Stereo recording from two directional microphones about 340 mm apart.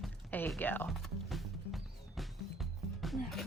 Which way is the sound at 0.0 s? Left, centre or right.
Centre.